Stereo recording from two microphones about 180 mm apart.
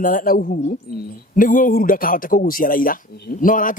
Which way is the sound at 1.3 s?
50° left (ahead or behind).